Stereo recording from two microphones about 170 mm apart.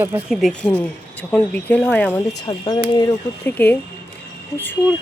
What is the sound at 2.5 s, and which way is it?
Speech, 25° left (ahead or behind).